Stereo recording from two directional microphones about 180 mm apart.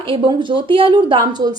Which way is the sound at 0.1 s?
25° right (ahead or behind).